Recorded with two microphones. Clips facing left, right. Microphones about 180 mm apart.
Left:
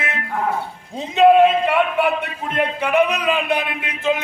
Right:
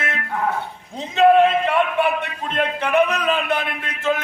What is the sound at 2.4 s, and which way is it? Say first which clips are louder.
A man's voice: left 1 dB; 10° left (ahead or behind).